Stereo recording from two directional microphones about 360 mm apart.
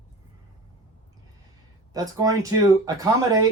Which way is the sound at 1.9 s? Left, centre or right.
Centre.